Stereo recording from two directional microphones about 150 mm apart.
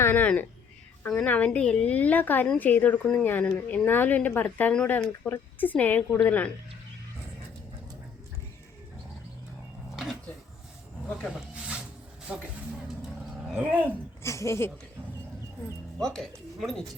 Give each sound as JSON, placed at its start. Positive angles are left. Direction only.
{"t": 0.0, "sound": "a woman's voice", "side_deg": 10}
{"t": 9.9, "sound": "a sound", "side_deg": 0}
{"t": 11.3, "sound": "snake", "side_deg": -5}
{"t": 12.3, "sound": "speech", "side_deg": -10}
{"t": 13.5, "sound": "speech", "side_deg": -10}
{"t": 13.8, "sound": "a child's voice", "side_deg": 20}
{"t": 16.0, "sound": "a woman's voice", "side_deg": 5}